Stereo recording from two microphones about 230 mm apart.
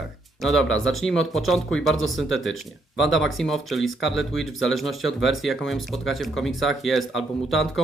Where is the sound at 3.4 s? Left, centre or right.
Centre.